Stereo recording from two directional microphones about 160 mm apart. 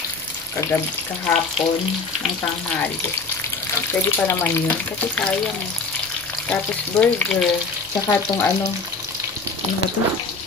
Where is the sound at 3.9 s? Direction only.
15° left (ahead or behind).